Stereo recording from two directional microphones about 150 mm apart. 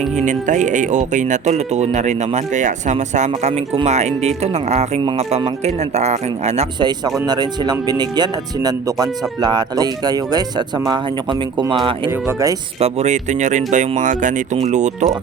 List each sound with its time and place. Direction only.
0.2 s speech: 55° right (ahead or behind)
6.7 s speech: 30° right (ahead or behind)
12.8 s speech: 50° right (ahead or behind)